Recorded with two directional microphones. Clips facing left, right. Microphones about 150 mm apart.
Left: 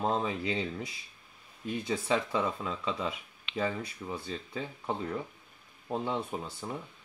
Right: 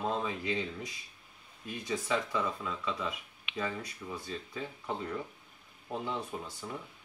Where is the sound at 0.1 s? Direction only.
30° left (ahead or behind).